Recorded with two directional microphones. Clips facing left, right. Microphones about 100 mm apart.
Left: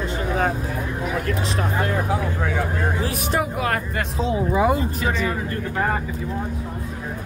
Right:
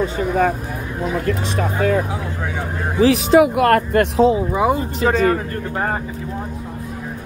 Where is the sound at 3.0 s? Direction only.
90° right; by 4.3 s 60° right (ahead or behind).